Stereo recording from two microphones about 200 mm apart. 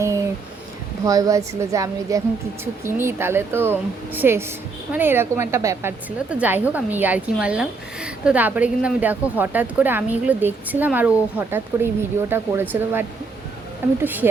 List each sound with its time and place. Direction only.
1.0 s a woman's voice: 15° right (ahead or behind)